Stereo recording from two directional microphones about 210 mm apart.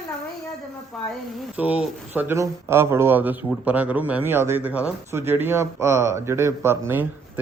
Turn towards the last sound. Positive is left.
turn(degrees=-10)  # may be behind; listen again after turning